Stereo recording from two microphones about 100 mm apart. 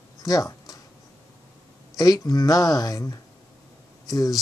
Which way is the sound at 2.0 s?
40° left (ahead or behind).